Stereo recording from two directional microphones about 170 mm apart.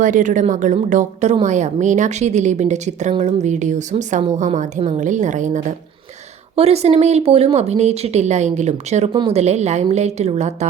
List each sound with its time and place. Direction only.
0.0 s a woman's voice: 50° right (ahead or behind)